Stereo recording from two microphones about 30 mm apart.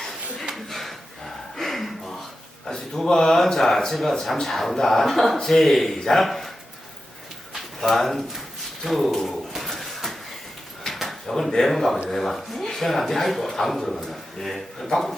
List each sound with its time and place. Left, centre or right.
0.0 s a sound: centre
2.6 s speech: centre
7.8 s speech: centre
9.2 s a sound: centre
10.9 s drawer open or close: centre
11.6 s speech: centre